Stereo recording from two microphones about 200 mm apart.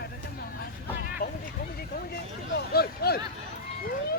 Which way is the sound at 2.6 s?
50° left (ahead or behind).